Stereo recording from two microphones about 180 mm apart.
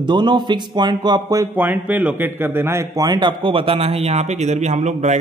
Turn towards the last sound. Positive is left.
turn(degrees=-40)  # may be behind; listen again after turning